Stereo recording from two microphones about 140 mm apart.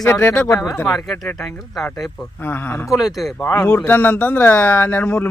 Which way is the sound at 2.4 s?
15° left (ahead or behind).